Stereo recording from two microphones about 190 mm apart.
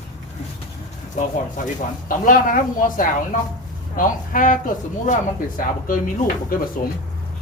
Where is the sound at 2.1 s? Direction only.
45° left (ahead or behind).